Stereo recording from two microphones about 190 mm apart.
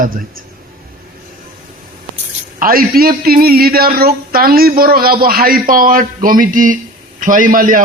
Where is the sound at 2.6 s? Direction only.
50° right (ahead or behind).